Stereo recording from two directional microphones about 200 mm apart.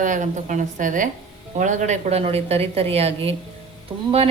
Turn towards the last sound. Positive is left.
turn(degrees=-5)  # may be behind; listen again after turning